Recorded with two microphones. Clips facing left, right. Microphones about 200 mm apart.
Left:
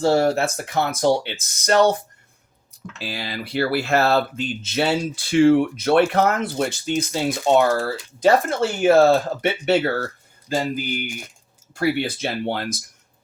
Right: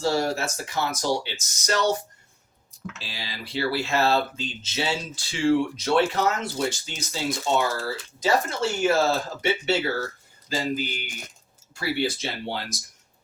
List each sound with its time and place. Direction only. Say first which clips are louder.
0.0 s speech: left 7 dB; 55° left (ahead or behind)
3.0 s speech: left 13 dB; 60° left (ahead or behind)
10.5 s a sound: left 4 dB; 55° left (ahead or behind)
11.7 s speech: left 5 dB; 55° left (ahead or behind)